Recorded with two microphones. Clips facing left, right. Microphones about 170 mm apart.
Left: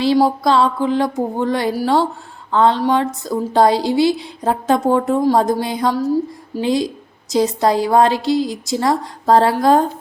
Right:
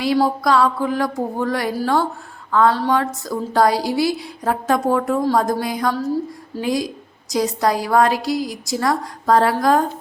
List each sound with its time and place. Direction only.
0.4 s a woman's voice: 25° left (ahead or behind)